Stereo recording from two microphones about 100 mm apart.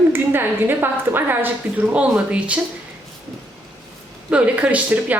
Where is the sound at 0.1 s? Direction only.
20° right (ahead or behind).